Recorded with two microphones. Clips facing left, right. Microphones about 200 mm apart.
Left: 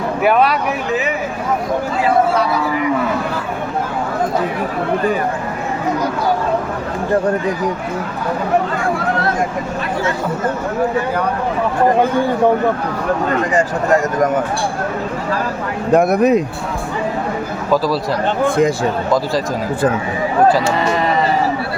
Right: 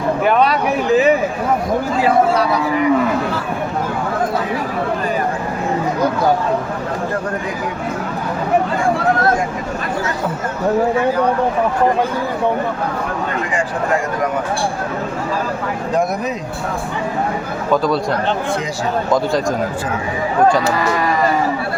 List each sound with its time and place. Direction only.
0.2 s speech: 10° left (ahead or behind)
15.9 s speech: 60° left (ahead or behind)
18.4 s speech: 55° left (ahead or behind)
19.1 s a man's voice: centre (ahead or behind)
20.7 s speech: 25° left (ahead or behind)